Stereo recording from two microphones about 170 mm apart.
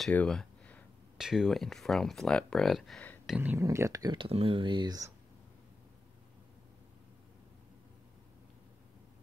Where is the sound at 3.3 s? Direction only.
10° right (ahead or behind).